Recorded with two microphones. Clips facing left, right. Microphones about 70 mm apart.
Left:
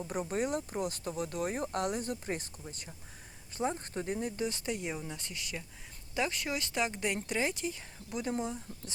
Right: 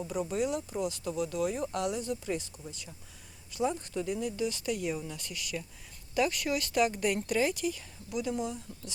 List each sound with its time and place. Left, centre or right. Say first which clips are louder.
0.1 s speech: right 1 dB; left